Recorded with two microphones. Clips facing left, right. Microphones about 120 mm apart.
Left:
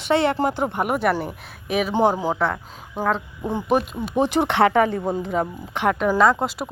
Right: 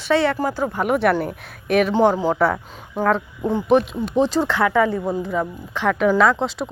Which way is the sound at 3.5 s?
15° left (ahead or behind).